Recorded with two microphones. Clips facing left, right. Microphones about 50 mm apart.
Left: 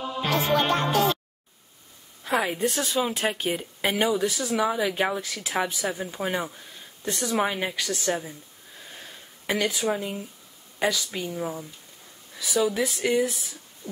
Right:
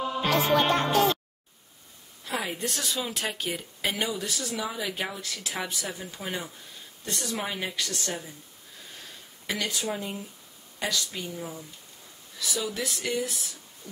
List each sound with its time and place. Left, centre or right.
0.3 s music: left
2.3 s speech: centre
9.5 s speech: left
10.8 s speech: left